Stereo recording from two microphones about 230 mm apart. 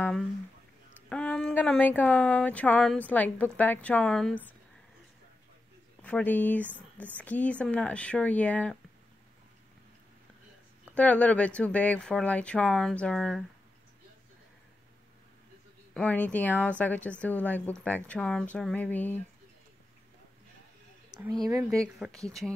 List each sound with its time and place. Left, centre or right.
1.0 s speech: centre
6.0 s speech: centre
6.6 s speech: centre
7.2 s speech: centre
10.9 s speech: centre
15.9 s speech: centre
21.1 s speech: centre
22.0 s speech: centre